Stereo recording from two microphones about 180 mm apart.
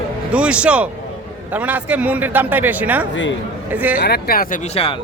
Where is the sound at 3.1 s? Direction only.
90° left.